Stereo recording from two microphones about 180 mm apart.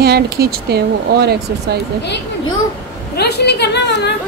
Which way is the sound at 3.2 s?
65° left (ahead or behind).